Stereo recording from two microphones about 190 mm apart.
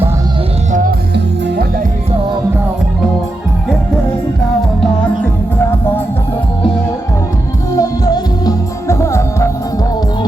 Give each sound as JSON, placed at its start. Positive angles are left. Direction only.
{"t": 0.7, "sound": "music", "side_deg": -45}
{"t": 7.8, "sound": "music", "side_deg": 20}